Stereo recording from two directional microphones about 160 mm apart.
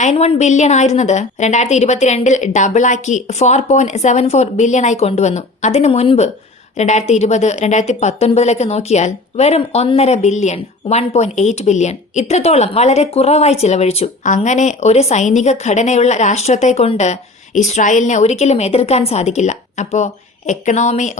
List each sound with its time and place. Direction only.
0.0 s a woman's voice: 45° left (ahead or behind)